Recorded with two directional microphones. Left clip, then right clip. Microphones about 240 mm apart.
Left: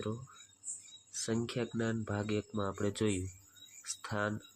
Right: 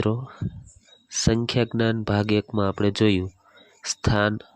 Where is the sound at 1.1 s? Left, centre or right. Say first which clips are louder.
Right 13 dB; right.